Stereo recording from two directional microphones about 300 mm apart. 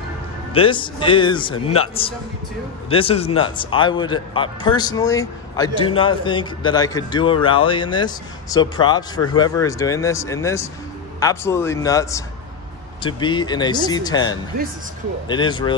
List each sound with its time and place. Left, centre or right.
0.5 s a man's voice: centre